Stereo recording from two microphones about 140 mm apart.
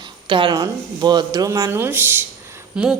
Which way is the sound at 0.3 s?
35° right (ahead or behind).